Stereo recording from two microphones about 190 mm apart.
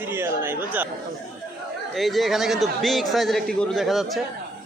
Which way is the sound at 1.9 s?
Centre (ahead or behind).